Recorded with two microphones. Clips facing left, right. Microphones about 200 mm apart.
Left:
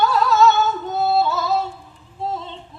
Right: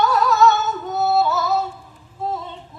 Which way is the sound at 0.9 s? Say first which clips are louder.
Right 2 dB; 25° left (ahead or behind).